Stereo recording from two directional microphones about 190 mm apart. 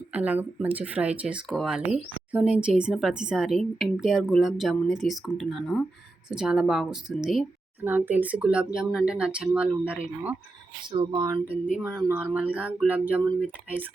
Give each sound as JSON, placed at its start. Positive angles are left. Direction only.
{"t": 0.1, "sound": "speech", "side_deg": -10}
{"t": 10.9, "sound": "speech", "side_deg": -20}
{"t": 11.8, "sound": "speech", "side_deg": -5}